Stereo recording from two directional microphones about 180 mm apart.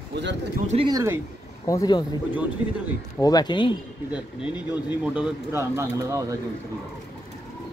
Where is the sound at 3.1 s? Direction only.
20° left (ahead or behind).